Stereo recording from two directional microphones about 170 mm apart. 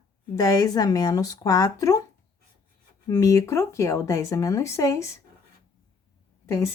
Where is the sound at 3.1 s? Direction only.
20° left (ahead or behind).